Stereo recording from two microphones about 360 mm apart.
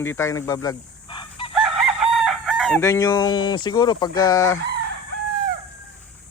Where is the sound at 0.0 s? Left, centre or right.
Centre.